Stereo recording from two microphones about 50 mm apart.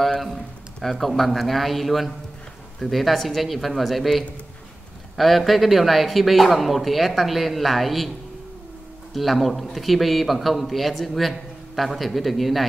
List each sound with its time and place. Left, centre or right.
0.7 s a man's voice: centre
9.1 s a man's voice: centre